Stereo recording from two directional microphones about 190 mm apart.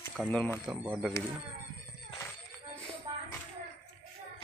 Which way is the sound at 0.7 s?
5° right (ahead or behind).